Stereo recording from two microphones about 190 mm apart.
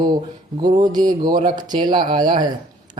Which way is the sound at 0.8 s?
20° right (ahead or behind).